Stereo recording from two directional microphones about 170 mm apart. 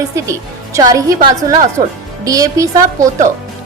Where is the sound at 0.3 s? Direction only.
20° right (ahead or behind).